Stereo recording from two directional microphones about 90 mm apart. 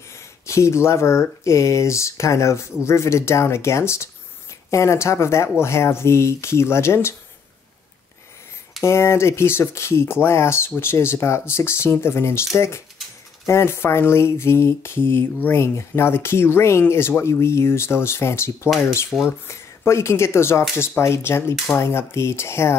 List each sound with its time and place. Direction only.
0.1 s speech: 30° left (ahead or behind)
8.8 s speech: 30° left (ahead or behind)